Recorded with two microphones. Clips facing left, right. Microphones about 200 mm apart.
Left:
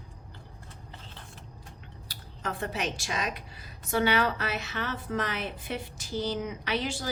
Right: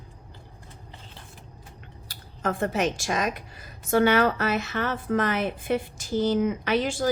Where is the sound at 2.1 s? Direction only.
50° right (ahead or behind).